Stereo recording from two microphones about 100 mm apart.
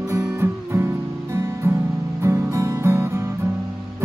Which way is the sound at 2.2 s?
30° right (ahead or behind).